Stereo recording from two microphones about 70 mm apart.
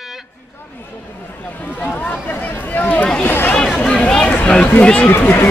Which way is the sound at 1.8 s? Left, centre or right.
Left.